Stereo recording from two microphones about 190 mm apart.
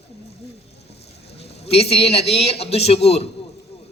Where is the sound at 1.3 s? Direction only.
35° left (ahead or behind).